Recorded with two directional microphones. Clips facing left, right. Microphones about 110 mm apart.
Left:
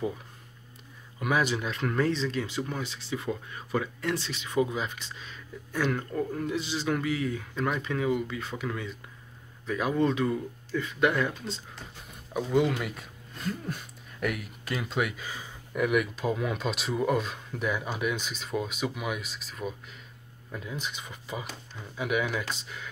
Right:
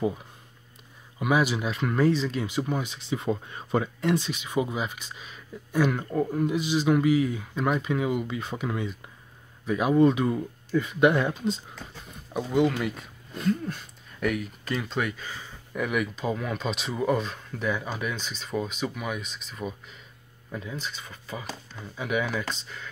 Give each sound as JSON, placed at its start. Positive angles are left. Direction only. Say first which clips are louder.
{"t": 1.2, "sound": "speech", "louder": "right 3 dB", "side_deg": -10}
{"t": 12.4, "sound": "speech", "louder": "right 2 dB", "side_deg": 0}
{"t": 20.7, "sound": "speech", "louder": "even", "side_deg": 15}